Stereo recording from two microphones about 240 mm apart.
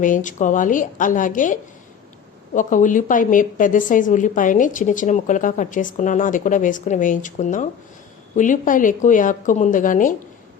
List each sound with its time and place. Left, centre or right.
0.0 s a woman's voice: left
2.6 s a woman's voice: left